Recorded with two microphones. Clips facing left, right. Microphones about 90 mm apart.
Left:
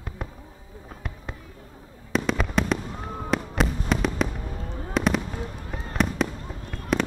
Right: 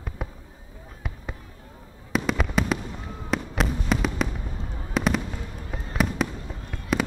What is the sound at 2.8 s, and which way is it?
Fireworks, 45° left (ahead or behind).